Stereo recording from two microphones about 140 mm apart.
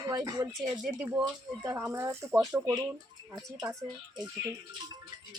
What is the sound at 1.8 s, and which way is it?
Speech, 15° right (ahead or behind).